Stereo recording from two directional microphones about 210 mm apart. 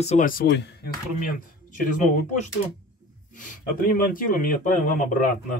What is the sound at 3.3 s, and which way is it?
A man's voice, 40° left (ahead or behind).